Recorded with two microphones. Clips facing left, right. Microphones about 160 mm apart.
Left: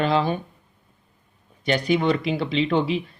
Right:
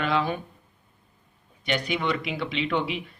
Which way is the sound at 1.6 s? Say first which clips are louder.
Left 6 dB; 35° left (ahead or behind).